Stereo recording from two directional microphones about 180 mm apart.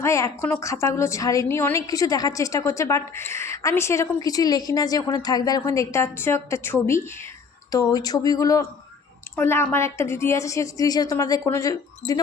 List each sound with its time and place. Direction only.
0.0 s a woman's voice: 15° left (ahead or behind)